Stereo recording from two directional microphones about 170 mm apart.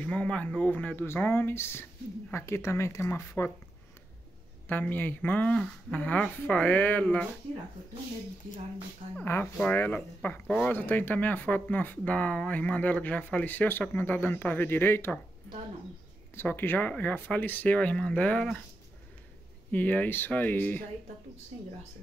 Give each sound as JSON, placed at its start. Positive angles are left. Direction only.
{"t": 0.0, "sound": "speech", "side_deg": 5}
{"t": 4.6, "sound": "speech", "side_deg": 10}
{"t": 9.1, "sound": "speech", "side_deg": 10}
{"t": 16.3, "sound": "speech", "side_deg": 10}
{"t": 19.7, "sound": "speech", "side_deg": 10}
{"t": 21.5, "sound": "speech", "side_deg": -40}